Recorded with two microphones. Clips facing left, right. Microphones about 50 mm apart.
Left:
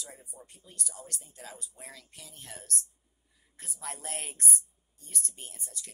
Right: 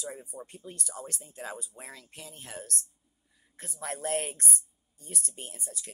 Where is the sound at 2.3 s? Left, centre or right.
Right.